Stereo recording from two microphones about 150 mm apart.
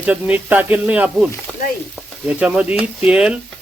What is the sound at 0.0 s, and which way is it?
Speech, 10° right (ahead or behind).